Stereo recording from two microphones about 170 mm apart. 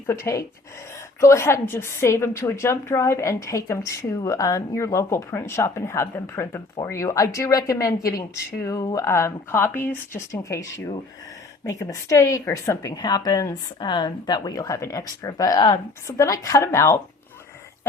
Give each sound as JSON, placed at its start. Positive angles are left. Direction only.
{"t": 0.1, "sound": "a woman's voice", "side_deg": 15}